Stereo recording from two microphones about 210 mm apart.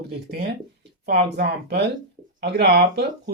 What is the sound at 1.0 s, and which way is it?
Speech, 50° right (ahead or behind).